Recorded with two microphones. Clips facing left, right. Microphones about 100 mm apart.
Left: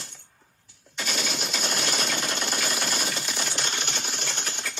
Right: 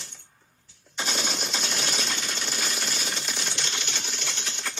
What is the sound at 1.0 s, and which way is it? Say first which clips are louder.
Machine gun: right 1 dB; 30° right (ahead or behind).